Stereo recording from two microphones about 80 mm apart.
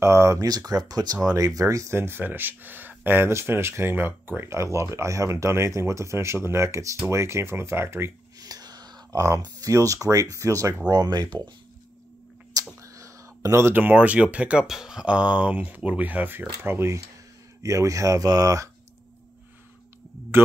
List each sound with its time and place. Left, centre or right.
0.0 s speech: right
0.5 s speech: right
2.0 s speech: right
8.4 s a sound: right
9.4 s speech: right
10.9 s speech: right
12.8 s a sound: right
13.7 s speech: right